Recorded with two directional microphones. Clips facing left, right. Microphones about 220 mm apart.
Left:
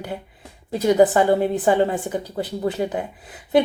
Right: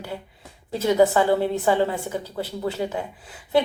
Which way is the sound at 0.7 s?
15° left (ahead or behind).